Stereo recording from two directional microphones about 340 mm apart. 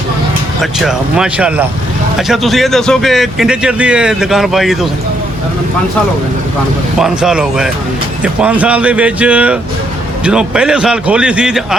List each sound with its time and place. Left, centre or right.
0.6 s a man's voice: centre
7.0 s a man's voice: centre